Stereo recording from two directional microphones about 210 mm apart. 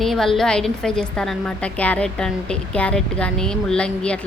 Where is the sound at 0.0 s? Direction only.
Centre (ahead or behind).